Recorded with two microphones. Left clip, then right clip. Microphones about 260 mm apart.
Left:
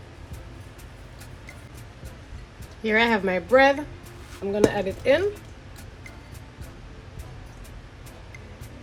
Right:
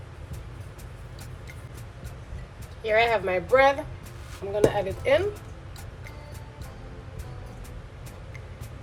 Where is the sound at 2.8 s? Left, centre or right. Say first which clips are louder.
Left 1 dB; left.